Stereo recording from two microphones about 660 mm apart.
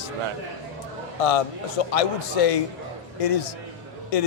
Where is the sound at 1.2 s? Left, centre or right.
Left.